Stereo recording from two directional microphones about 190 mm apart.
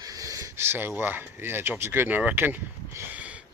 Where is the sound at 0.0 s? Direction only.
15° right (ahead or behind).